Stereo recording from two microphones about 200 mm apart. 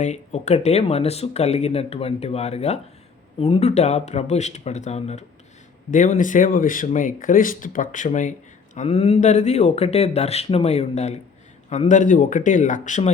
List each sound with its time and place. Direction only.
0.0 s speech: 35° left (ahead or behind)